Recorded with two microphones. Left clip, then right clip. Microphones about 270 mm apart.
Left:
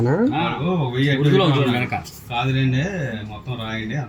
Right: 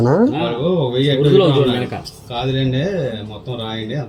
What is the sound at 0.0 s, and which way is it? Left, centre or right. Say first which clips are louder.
Speech: right 6 dB; centre.